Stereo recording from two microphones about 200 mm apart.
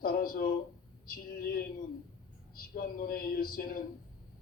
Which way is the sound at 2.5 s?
45° left (ahead or behind).